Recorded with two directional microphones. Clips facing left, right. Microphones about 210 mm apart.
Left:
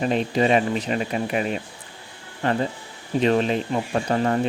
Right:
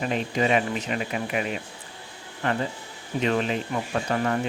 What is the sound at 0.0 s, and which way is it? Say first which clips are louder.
Speech: left 4 dB; 35° left (ahead or behind).